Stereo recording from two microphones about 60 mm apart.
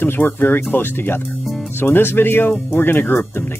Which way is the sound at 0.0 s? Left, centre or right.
Left.